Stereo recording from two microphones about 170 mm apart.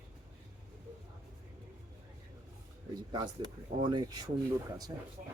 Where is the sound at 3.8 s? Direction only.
25° right (ahead or behind).